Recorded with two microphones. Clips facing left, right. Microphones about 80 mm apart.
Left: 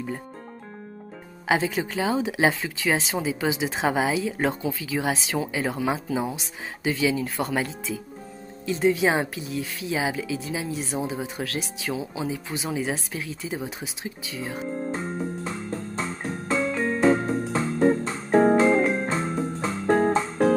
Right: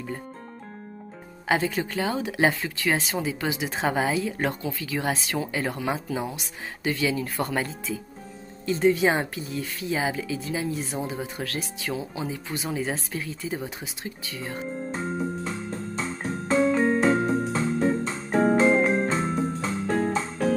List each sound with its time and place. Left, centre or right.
1.5 s speech: centre
15.4 s music: left
16.5 s music: right
17.5 s music: left
18.8 s music: right
19.6 s music: left